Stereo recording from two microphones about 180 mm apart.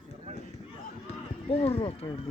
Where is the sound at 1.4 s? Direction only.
35° left (ahead or behind).